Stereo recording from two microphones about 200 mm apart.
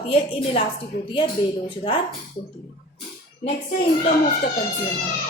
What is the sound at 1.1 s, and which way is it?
Speech, 25° left (ahead or behind).